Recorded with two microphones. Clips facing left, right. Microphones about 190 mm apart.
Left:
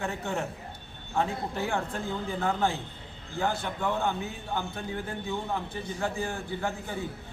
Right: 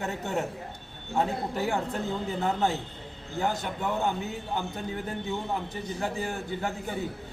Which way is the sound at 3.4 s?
15° right (ahead or behind).